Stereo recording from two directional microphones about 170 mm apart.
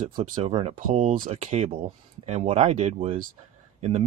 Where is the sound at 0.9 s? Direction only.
50° right (ahead or behind).